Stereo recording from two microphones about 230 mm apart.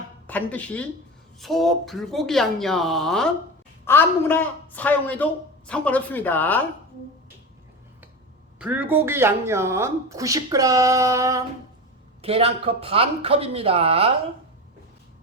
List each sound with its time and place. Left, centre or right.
0.3 s a man's voice: centre
8.5 s a woman's voice: centre
12.2 s speech: right